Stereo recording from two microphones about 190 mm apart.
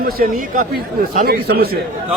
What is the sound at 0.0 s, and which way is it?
Speech, 50° right (ahead or behind).